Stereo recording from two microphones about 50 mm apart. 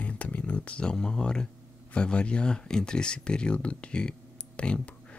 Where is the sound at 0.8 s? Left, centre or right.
Centre.